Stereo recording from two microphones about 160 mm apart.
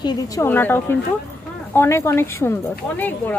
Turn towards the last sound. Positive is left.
turn(degrees=10)  # may be behind; listen again after turning